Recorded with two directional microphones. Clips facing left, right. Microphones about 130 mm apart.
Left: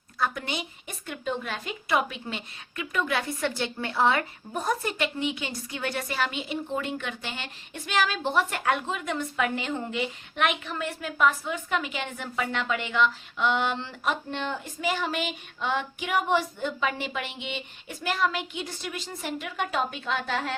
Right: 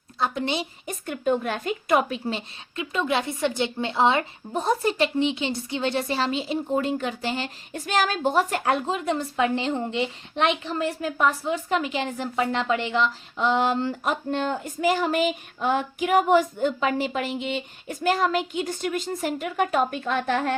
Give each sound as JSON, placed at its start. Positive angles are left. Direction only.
{"t": 0.2, "sound": "a woman's voice", "side_deg": -25}